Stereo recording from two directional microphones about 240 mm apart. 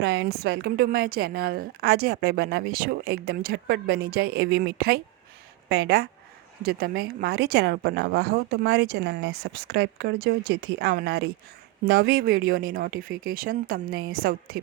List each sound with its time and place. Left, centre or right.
0.0 s a woman's voice: right